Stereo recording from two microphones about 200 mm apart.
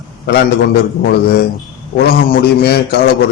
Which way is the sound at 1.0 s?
50° left (ahead or behind).